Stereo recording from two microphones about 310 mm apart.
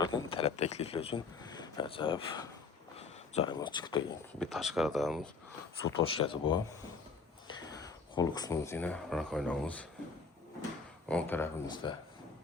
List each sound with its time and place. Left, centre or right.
0.0 s a man's voice: centre
4.4 s speech: centre
6.0 s speech: centre
11.1 s speech: centre